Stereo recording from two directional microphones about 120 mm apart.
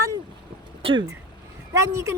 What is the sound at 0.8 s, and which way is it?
Speech, 45° right (ahead or behind).